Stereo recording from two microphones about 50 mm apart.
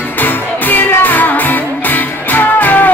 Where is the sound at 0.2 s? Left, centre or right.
Left.